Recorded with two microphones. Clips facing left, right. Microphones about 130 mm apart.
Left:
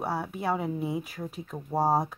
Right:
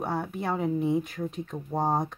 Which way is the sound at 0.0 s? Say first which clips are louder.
Even; 5° left (ahead or behind).